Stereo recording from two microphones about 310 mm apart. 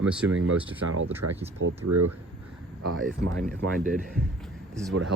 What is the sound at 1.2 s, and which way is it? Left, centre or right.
Speech, right.